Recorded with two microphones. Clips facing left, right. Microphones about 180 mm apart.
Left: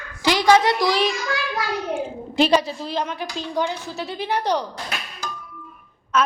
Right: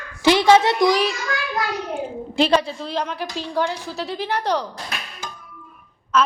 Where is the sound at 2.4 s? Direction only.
5° left (ahead or behind).